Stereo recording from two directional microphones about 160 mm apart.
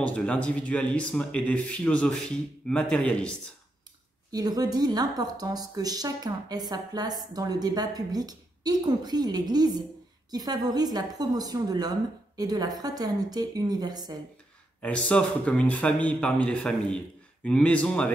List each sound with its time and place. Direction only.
0.0 s speech: 5° left (ahead or behind)
4.3 s a woman's voice: 25° right (ahead or behind)
14.8 s speech: 5° left (ahead or behind)